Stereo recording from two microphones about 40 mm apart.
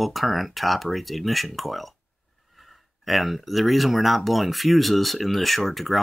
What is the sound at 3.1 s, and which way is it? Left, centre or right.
Speech, centre.